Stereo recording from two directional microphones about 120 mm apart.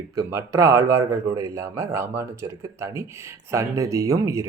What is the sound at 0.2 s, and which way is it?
Speech, 25° right (ahead or behind).